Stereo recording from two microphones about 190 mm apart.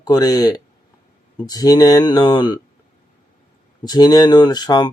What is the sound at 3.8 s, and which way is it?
Speech, 20° left (ahead or behind).